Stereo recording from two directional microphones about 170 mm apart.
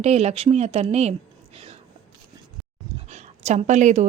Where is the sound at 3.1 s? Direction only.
45° right (ahead or behind).